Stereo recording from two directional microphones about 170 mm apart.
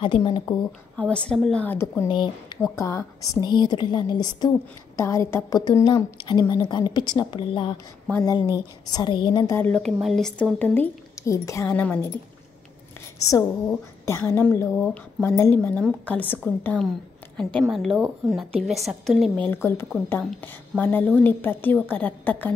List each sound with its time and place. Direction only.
0.0 s speech: 30° left (ahead or behind)
0.7 s speech: 5° left (ahead or behind)
2.0 s speech: 25° left (ahead or behind)
9.6 s speech: 5° left (ahead or behind)
13.3 s a woman's voice: 15° left (ahead or behind)
19.4 s speech: 15° left (ahead or behind)